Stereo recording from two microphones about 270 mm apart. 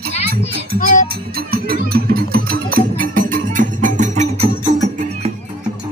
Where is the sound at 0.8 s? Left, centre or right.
Left.